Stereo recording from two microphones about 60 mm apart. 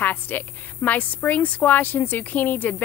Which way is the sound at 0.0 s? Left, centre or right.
Left.